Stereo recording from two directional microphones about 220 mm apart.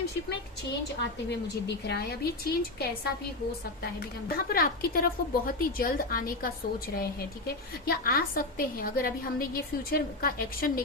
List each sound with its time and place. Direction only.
1.6 s a woman's voice: 50° left (ahead or behind)
4.4 s a woman's voice: 40° left (ahead or behind)